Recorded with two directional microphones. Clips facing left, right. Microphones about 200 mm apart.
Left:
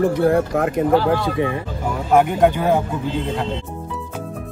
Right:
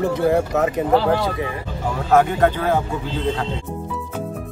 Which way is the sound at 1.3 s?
30° left (ahead or behind).